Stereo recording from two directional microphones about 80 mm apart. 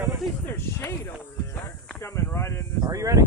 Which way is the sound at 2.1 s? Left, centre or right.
Left.